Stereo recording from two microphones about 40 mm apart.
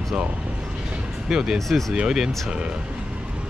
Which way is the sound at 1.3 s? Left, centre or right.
Centre.